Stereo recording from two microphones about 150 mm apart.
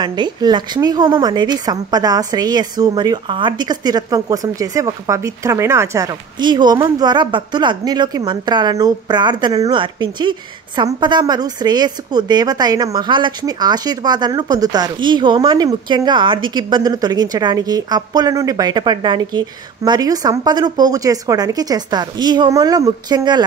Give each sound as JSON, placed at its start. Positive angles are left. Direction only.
{"t": 0.0, "sound": "speech", "side_deg": -30}